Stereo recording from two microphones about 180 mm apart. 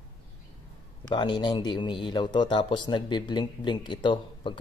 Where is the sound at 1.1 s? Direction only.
25° left (ahead or behind).